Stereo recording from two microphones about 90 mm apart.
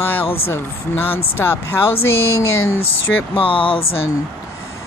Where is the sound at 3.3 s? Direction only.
80° left.